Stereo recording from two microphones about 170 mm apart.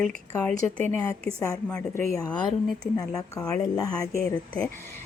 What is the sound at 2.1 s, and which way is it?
Speech, 25° left (ahead or behind).